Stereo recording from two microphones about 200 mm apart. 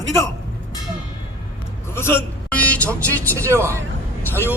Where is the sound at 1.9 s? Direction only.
10° left (ahead or behind).